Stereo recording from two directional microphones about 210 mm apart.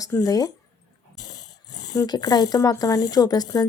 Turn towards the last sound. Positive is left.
turn(degrees=20)  # may be behind; listen again after turning